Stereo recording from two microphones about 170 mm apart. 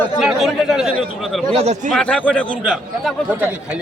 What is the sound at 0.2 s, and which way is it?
Speech, centre (ahead or behind).